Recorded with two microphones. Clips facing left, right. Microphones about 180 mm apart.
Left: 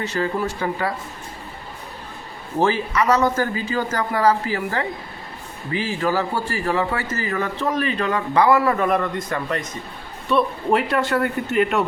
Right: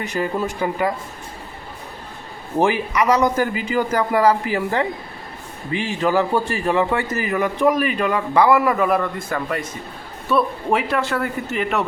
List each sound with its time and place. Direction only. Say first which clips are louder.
0.0 s a man's voice: even; 15° right (ahead or behind)
2.6 s a man's voice: right 1 dB; 15° right (ahead or behind)